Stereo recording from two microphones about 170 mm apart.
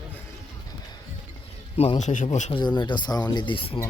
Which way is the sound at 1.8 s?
40° left (ahead or behind).